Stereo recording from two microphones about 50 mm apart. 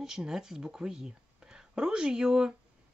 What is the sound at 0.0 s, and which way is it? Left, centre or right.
Speech, centre.